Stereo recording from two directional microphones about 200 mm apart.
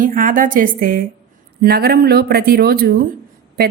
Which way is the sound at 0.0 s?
40° right (ahead or behind).